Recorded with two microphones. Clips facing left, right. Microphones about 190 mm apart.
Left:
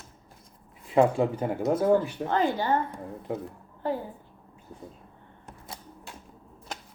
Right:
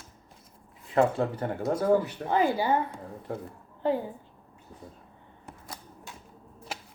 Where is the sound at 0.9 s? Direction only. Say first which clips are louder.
Left 3 dB; 10° left (ahead or behind).